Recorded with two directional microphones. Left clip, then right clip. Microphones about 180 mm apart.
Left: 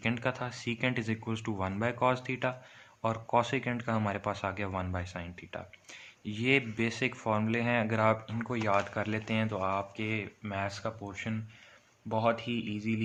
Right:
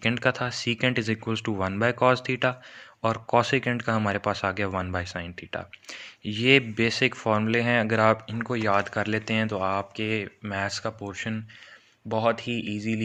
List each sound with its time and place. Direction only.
0.0 s speech: 30° right (ahead or behind)